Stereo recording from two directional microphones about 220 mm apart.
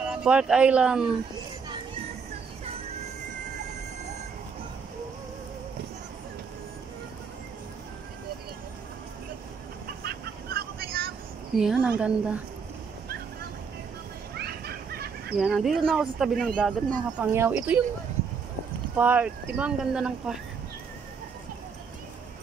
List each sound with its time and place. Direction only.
0.1 s speech: 5° right (ahead or behind)
9.8 s vehicle: 45° right (ahead or behind)
11.5 s speech: 5° right (ahead or behind)
14.3 s a sound: 45° right (ahead or behind)
15.3 s speech: centre (ahead or behind)
18.9 s speech: 5° right (ahead or behind)